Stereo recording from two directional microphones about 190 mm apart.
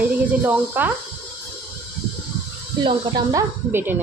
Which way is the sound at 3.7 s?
10° right (ahead or behind).